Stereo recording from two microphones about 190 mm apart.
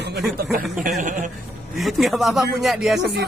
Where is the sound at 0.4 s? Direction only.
50° right (ahead or behind).